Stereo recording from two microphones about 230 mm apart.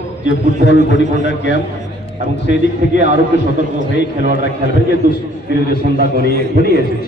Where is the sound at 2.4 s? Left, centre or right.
Left.